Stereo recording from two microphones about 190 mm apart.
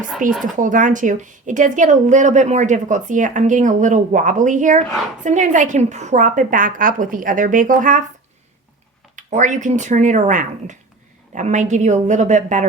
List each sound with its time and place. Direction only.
0.2 s a woman's voice: 45° right (ahead or behind)
9.1 s a woman's voice: 40° right (ahead or behind)